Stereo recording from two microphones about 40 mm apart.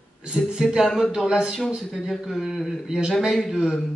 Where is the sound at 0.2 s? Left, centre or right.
Centre.